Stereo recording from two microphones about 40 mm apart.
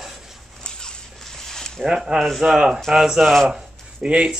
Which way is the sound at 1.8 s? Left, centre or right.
Centre.